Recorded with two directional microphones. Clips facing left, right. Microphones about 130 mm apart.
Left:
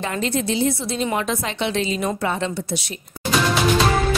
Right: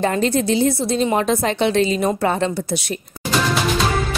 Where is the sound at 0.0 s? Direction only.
40° right (ahead or behind).